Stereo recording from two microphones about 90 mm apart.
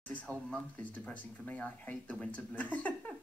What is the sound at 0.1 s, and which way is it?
Speech, 15° left (ahead or behind).